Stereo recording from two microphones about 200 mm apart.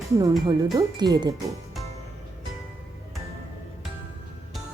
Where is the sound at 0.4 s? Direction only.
20° right (ahead or behind).